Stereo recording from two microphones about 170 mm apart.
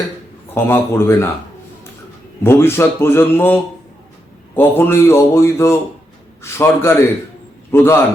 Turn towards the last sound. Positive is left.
turn(degrees=15)  # may be behind; listen again after turning